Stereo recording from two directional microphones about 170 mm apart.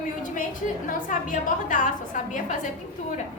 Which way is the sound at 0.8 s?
50° left (ahead or behind).